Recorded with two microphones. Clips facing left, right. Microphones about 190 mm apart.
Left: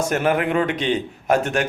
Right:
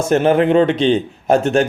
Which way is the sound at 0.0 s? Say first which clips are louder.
Right 7 dB; 30° right (ahead or behind).